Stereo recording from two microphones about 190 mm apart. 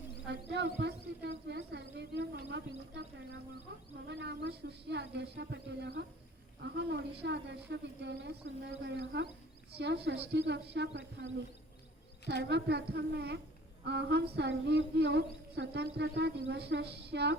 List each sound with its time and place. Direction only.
0.3 s cricket: 65° right (ahead or behind)
12.3 s cricket: 65° right (ahead or behind)